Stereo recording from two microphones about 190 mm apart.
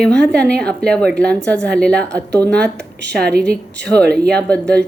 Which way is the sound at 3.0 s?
65° right (ahead or behind).